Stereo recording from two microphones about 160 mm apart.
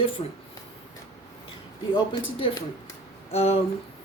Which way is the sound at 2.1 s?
35° left (ahead or behind).